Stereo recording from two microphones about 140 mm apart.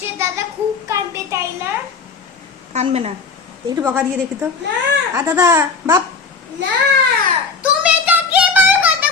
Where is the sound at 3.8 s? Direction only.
10° right (ahead or behind).